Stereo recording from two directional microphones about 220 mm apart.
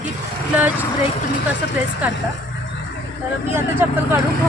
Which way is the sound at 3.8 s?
10° right (ahead or behind).